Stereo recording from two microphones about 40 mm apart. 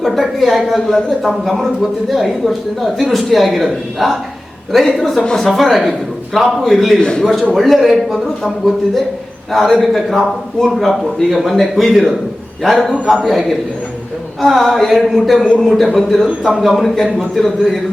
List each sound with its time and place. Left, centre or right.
0.0 s speech: centre
0.9 s speech: centre
2.0 s speech: centre
7.0 s a man's voice: left
7.5 s speech: centre